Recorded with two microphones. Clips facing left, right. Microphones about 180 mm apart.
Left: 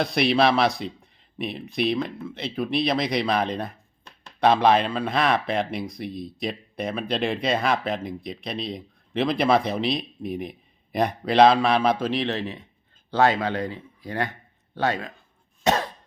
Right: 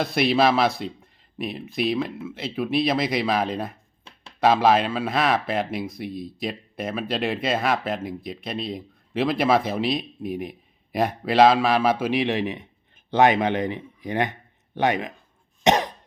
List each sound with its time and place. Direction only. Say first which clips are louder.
0.0 s speech: even; centre (ahead or behind); by 15.1 s 20° right (ahead or behind)
15.6 s cough: right 3 dB; 20° right (ahead or behind)